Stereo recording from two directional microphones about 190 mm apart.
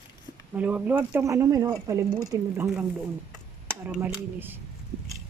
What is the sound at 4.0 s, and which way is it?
Speech, 10° right (ahead or behind).